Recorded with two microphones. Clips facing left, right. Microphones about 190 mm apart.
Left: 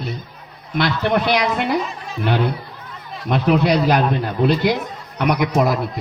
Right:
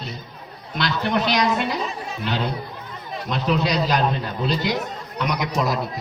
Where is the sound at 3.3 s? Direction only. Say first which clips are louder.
Left 6 dB; 55° left (ahead or behind).